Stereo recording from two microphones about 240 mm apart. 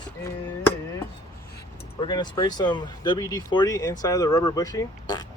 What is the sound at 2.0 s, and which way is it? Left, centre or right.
Speech, centre.